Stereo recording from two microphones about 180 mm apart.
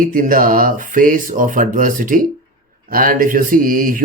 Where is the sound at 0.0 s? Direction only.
50° right (ahead or behind).